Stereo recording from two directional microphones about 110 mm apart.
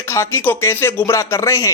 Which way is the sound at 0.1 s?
25° left (ahead or behind).